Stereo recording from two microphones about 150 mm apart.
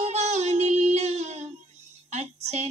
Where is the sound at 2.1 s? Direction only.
45° right (ahead or behind).